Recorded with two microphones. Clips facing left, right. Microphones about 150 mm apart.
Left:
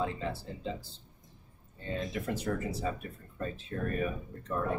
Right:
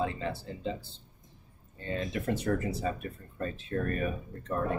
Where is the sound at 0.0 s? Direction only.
65° right (ahead or behind).